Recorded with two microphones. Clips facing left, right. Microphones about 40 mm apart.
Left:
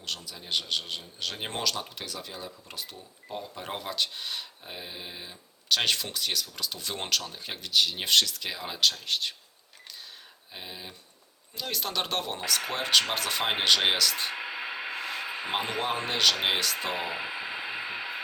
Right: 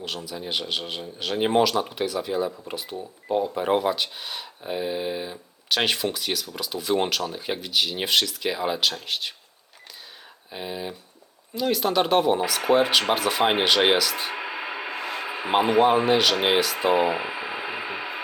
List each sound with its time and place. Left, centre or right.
0.3 s speech: centre
10.5 s speech: centre